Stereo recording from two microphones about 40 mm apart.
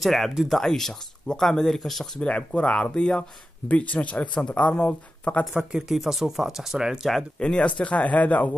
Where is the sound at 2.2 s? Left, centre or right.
Left.